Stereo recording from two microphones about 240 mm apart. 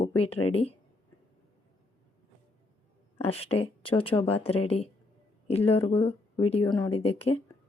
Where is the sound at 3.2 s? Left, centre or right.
Left.